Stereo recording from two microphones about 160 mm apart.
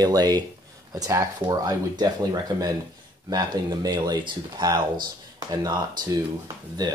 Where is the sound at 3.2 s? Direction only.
25° right (ahead or behind).